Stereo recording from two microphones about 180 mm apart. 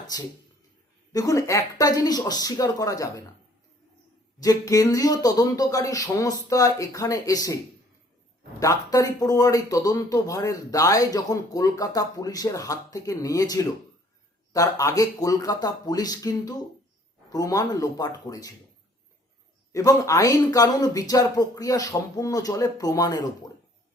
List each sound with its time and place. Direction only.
0.1 s speech: 20° left (ahead or behind)
4.4 s speech: 20° left (ahead or behind)
8.5 s speech: 20° left (ahead or behind)
19.7 s speech: 20° left (ahead or behind)